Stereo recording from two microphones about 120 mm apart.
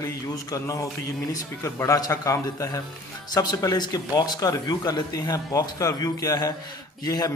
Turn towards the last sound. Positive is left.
turn(degrees=30)  # may be behind; listen again after turning